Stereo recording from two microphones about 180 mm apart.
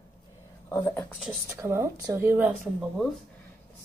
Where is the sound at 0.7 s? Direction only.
15° left (ahead or behind).